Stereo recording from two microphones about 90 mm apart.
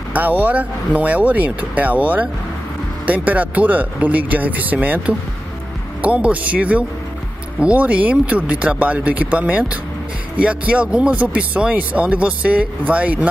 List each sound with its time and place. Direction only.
0.1 s speech: 20° right (ahead or behind)